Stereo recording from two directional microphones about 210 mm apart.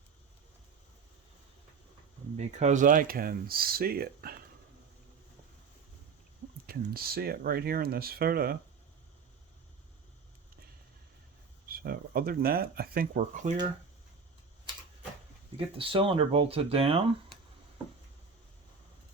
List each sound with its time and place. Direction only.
2.3 s speech: 35° right (ahead or behind)
6.7 s speech: 45° right (ahead or behind)
11.7 s speech: 45° right (ahead or behind)
15.5 s speech: 25° right (ahead or behind)